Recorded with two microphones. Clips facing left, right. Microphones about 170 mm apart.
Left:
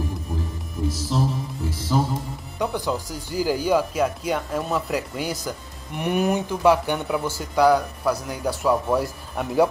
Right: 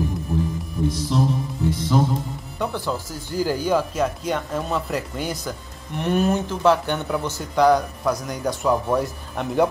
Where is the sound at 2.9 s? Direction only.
5° left (ahead or behind).